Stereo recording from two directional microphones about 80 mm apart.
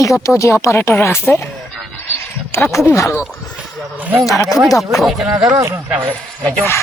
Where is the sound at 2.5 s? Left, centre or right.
Left.